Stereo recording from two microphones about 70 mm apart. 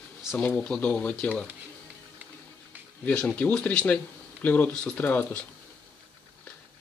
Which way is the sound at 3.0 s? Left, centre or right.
Centre.